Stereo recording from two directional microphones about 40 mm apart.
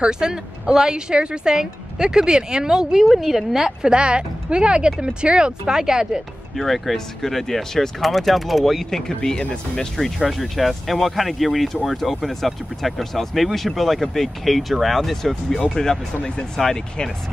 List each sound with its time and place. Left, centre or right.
0.0 s speech: centre
3.9 s speech: right
5.7 s speech: centre
6.5 s speech: centre
8.9 s speech: centre
9.9 s speech: centre